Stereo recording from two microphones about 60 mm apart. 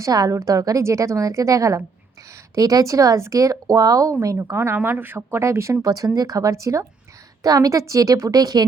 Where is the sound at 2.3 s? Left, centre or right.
Right.